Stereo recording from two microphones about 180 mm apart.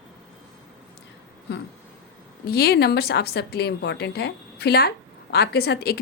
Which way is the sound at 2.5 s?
60° left (ahead or behind).